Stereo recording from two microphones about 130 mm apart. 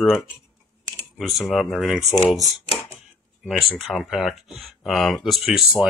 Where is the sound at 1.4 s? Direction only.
Centre (ahead or behind).